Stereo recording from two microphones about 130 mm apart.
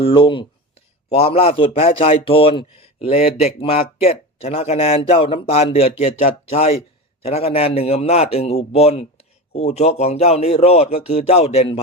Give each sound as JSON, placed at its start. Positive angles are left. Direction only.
{"t": 0.0, "sound": "a man's voice", "side_deg": 40}
{"t": 6.0, "sound": "a man's voice", "side_deg": 60}